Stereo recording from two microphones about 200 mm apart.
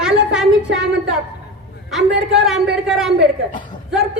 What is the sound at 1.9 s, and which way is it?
Speech, centre (ahead or behind).